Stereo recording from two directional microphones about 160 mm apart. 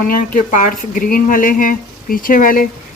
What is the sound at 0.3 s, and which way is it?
Speech, 50° left (ahead or behind).